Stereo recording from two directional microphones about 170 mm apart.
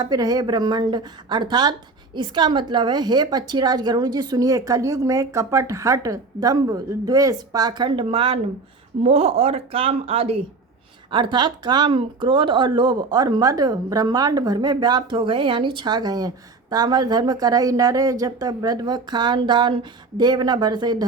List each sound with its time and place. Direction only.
0.0 s speech: 20° right (ahead or behind)